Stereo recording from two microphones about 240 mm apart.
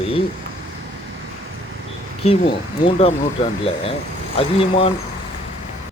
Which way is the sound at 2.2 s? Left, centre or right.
Left.